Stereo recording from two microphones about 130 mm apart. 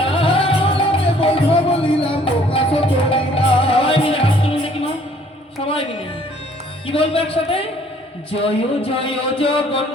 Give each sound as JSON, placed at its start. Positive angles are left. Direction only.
{"t": 0.0, "sound": "music", "side_deg": 45}
{"t": 6.8, "sound": "speech", "side_deg": 45}